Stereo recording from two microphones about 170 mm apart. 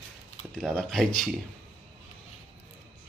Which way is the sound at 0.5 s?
5° left (ahead or behind).